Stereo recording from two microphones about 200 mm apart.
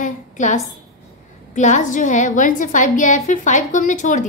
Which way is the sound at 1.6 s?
40° left (ahead or behind).